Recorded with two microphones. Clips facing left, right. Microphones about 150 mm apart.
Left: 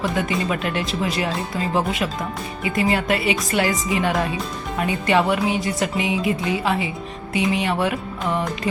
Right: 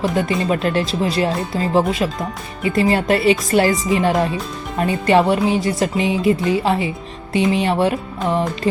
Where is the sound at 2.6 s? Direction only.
35° right (ahead or behind).